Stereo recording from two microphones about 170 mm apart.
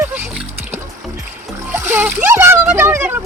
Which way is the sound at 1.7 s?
10° right (ahead or behind).